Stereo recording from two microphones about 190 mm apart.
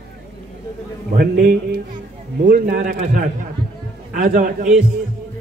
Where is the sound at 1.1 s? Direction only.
55° right (ahead or behind).